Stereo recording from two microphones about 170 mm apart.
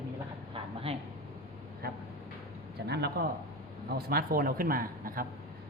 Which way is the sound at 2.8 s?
75° right (ahead or behind).